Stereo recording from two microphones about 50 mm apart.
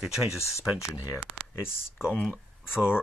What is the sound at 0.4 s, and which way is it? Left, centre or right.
Speech, left.